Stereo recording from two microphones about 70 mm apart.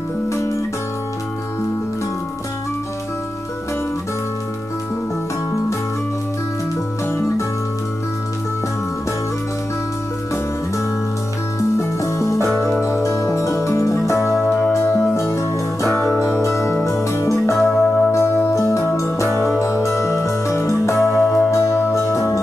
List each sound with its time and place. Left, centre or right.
0.3 s music: left
7.1 s music: left
12.0 s music: left
14.8 s music: left
17.7 s music: centre
18.1 s music: left